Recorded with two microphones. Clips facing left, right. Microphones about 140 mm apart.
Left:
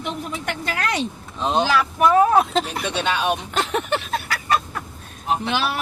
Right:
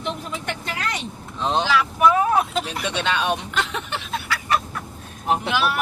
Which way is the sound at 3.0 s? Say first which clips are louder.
Left 1 dB; 5° left (ahead or behind).